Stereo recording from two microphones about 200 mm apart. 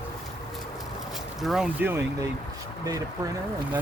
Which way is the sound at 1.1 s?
Centre (ahead or behind).